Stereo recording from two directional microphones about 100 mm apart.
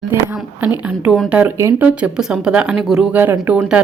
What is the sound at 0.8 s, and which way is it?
Speech, 10° right (ahead or behind).